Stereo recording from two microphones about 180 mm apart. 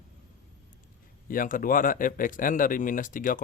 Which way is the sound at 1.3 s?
50° left (ahead or behind).